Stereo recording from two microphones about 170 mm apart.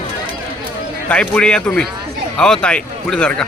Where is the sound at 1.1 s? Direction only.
5° left (ahead or behind).